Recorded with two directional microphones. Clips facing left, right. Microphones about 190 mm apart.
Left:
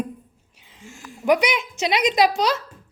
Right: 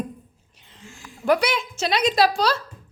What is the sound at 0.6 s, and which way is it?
A woman's voice, 10° left (ahead or behind).